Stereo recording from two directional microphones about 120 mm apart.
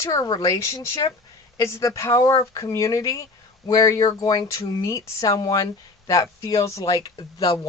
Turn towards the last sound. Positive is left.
turn(degrees=35)  # may be behind; listen again after turning